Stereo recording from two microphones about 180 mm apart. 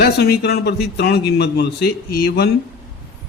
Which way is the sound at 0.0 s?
65° left (ahead or behind).